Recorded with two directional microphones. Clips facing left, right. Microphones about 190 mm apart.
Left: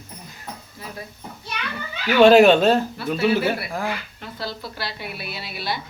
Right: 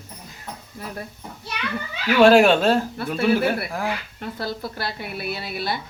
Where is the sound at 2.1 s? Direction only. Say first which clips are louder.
Left 2 dB; 5° right (ahead or behind).